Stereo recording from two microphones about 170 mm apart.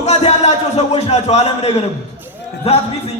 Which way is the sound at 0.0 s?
40° left (ahead or behind).